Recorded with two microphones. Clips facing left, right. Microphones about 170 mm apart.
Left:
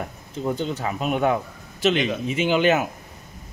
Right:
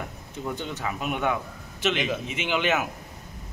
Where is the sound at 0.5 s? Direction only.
35° left (ahead or behind).